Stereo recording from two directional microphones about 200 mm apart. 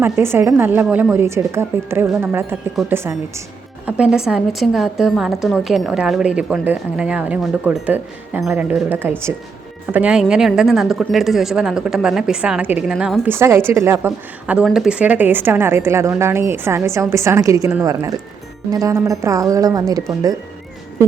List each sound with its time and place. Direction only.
0.0 s a woman's voice: 10° right (ahead or behind)